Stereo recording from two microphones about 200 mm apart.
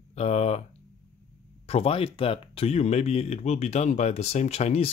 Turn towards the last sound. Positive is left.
turn(degrees=30)  # may be behind; listen again after turning